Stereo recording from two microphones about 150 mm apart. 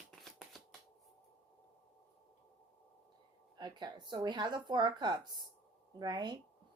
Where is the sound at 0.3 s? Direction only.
Centre (ahead or behind).